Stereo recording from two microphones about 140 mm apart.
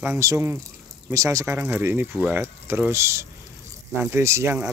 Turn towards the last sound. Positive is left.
turn(degrees=-20)  # may be behind; listen again after turning